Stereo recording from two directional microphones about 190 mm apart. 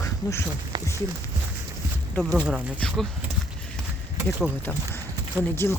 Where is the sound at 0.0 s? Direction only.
15° left (ahead or behind).